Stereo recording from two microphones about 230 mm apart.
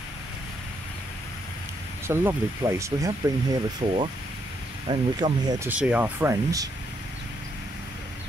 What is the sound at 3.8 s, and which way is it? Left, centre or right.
Speech, right.